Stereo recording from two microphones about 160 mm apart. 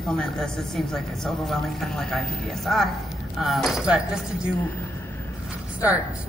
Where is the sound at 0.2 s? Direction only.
Centre (ahead or behind).